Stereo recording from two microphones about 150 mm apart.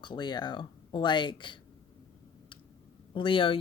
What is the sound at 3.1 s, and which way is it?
Speech, 35° left (ahead or behind).